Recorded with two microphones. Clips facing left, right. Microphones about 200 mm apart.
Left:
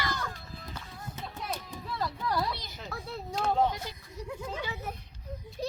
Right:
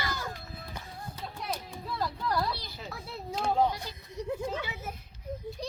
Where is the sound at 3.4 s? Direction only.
5° right (ahead or behind).